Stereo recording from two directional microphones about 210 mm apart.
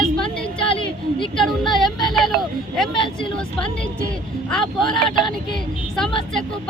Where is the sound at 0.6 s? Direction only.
25° left (ahead or behind).